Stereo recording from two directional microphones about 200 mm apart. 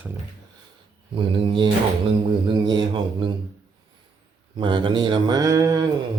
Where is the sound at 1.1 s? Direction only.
25° right (ahead or behind).